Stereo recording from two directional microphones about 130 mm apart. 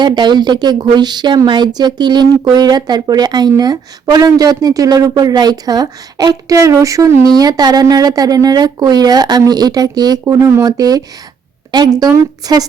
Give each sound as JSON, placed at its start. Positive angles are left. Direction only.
{"t": 0.0, "sound": "a woman's voice", "side_deg": -35}